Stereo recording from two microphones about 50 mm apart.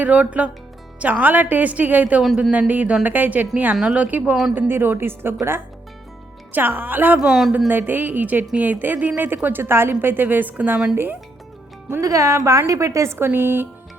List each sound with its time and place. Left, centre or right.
0.0 s a woman's voice: right
4.5 s a woman's voice: right
6.5 s a woman's voice: right
7.2 s speech: centre
7.7 s a woman's voice: right
11.9 s speech: right
13.1 s a woman's voice: right